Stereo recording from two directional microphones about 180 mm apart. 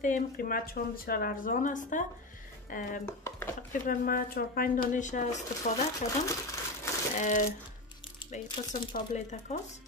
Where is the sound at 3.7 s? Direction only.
50° left (ahead or behind).